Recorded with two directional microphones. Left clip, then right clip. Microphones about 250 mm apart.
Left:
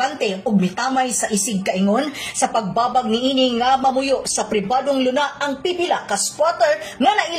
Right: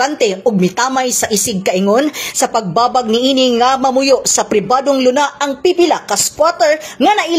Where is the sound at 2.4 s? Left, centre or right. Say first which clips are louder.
Right 5 dB; right.